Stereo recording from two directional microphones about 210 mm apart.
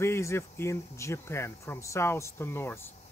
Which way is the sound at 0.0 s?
15° left (ahead or behind).